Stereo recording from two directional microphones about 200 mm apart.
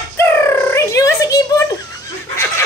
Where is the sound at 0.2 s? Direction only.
10° left (ahead or behind).